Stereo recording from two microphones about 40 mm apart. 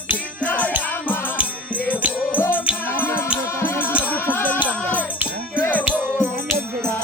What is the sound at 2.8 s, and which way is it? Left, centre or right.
Music, left.